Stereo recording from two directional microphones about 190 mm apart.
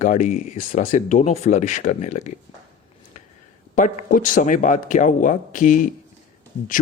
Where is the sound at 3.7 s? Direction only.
45° left (ahead or behind).